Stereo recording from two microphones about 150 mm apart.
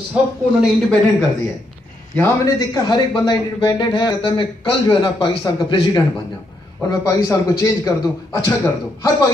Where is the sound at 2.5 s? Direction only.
25° left (ahead or behind).